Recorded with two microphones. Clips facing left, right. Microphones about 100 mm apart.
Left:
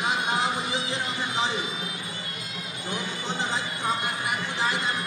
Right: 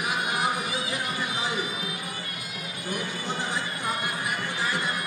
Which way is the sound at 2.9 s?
20° left (ahead or behind).